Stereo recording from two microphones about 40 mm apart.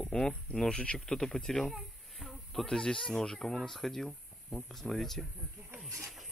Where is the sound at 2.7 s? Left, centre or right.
Centre.